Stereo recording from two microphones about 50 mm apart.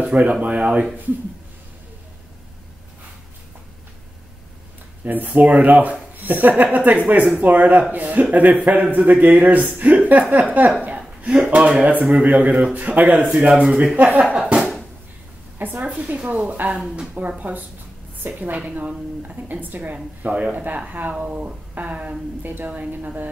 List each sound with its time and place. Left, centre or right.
0.0 s speech: right
5.0 s speech: right
11.0 s speech: centre; by 13.3 s right
13.5 s speech: centre
13.9 s speech: right
14.3 s speech: centre
15.6 s speech: right
16.0 s speech: right
18.6 s speech: right
22.4 s speech: right